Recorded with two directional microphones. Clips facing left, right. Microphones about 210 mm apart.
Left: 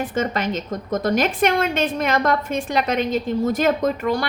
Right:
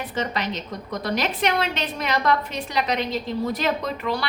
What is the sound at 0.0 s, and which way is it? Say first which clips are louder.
A woman's voice: left 5 dB; 45° left (ahead or behind).